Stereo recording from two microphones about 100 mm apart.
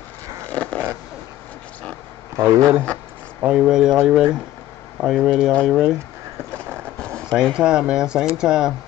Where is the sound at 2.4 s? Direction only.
30° right (ahead or behind).